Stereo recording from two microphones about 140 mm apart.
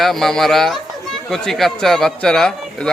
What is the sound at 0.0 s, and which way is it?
Speech, centre (ahead or behind).